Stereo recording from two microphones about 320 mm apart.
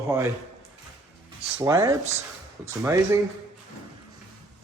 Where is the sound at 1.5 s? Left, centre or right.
Centre.